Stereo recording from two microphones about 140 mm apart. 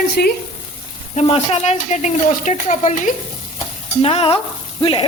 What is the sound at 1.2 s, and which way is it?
Speech, 50° left (ahead or behind).